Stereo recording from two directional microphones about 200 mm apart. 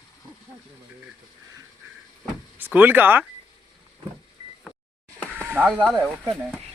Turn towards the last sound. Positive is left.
turn(degrees=0)  # may be behind; listen again after turning